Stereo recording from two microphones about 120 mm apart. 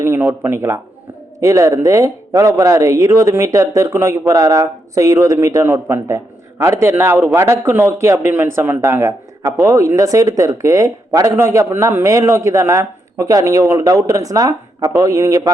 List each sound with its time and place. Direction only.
0.0 s speech: 20° right (ahead or behind)